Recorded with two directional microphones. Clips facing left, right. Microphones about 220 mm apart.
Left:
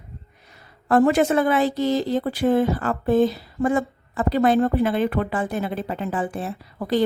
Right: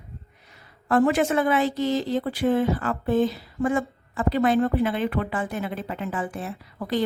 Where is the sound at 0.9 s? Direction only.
40° left (ahead or behind).